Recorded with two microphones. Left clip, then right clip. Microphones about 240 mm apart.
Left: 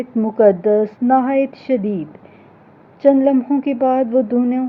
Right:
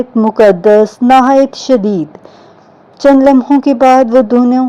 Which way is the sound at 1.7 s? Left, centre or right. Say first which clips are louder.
Right 9 dB; right.